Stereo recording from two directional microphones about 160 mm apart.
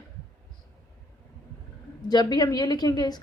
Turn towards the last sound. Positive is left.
turn(degrees=25)  # may be behind; listen again after turning